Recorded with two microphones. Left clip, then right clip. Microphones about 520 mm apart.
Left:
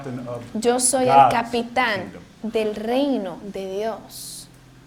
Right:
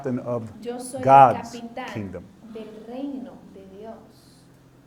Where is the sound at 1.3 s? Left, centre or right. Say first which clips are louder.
Left 7 dB; left.